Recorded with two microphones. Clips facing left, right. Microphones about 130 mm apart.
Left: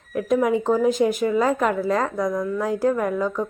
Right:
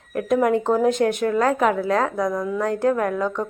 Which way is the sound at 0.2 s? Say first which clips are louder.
Right 1 dB; centre (ahead or behind).